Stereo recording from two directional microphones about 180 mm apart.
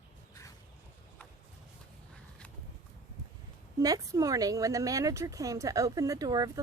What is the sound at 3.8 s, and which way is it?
Speech, 20° right (ahead or behind).